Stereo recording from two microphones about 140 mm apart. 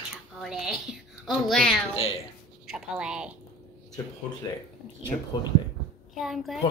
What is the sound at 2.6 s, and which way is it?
Speech, 5° right (ahead or behind).